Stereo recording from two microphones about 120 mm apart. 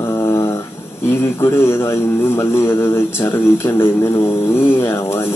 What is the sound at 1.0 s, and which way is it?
A man's voice, 25° left (ahead or behind).